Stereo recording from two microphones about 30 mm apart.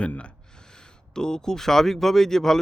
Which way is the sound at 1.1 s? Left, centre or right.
Left.